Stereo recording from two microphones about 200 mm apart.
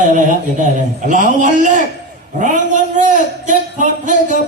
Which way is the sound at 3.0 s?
40° right (ahead or behind).